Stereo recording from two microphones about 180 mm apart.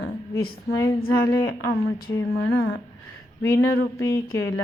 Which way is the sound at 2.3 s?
70° left (ahead or behind).